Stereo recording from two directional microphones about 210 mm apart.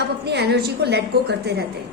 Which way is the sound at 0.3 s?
50° right (ahead or behind).